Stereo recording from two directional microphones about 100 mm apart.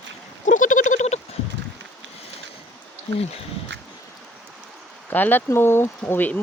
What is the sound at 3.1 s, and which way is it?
Speech, 90° left.